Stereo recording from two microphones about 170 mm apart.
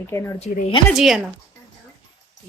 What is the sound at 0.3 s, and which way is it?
Speech, 40° left (ahead or behind).